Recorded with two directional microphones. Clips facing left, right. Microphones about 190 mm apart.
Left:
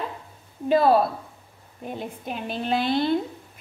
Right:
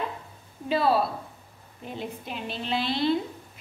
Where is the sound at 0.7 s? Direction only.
50° left (ahead or behind).